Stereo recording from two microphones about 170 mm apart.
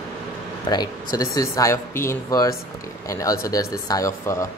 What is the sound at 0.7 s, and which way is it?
Speech, 25° left (ahead or behind).